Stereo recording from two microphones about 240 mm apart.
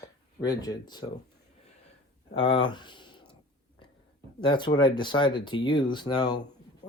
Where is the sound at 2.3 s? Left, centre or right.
Left.